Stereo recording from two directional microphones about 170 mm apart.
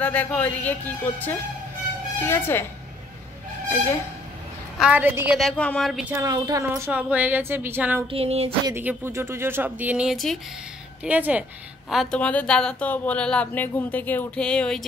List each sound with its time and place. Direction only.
0.0 s a woman's voice: 10° left (ahead or behind)
4.7 s speech: 10° right (ahead or behind)
5.4 s speech: 5° left (ahead or behind)
6.1 s a woman's voice: 20° right (ahead or behind)
6.8 s speech: 5° right (ahead or behind)
8.1 s a sound: 35° right (ahead or behind)
8.6 s speech: 15° right (ahead or behind)
11.9 s a woman's voice: centre (ahead or behind)